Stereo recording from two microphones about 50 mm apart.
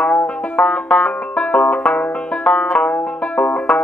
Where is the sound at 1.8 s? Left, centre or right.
Left.